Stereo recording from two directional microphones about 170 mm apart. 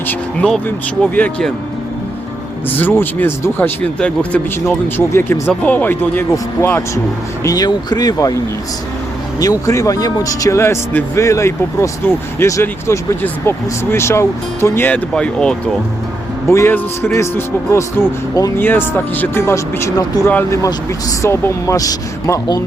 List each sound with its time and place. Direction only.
0.1 s speech: 5° left (ahead or behind)
2.6 s speech: 10° left (ahead or behind)
9.4 s speech: 20° left (ahead or behind)